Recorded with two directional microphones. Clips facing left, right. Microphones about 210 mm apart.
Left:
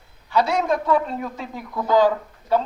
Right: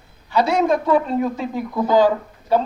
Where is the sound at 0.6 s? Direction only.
25° right (ahead or behind).